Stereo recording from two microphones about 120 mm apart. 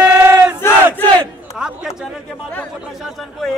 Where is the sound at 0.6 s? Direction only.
20° left (ahead or behind).